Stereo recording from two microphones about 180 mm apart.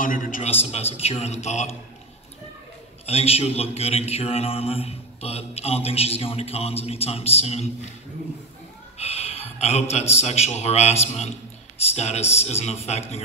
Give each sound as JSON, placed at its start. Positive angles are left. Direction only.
{"t": 0.0, "sound": "a man's voice", "side_deg": 50}
{"t": 0.5, "sound": "speech", "side_deg": 35}
{"t": 3.1, "sound": "speech", "side_deg": 35}
{"t": 8.9, "sound": "speech", "side_deg": 35}